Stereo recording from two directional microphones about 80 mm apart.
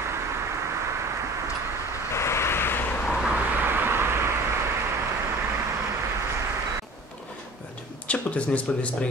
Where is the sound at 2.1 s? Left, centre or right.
Left.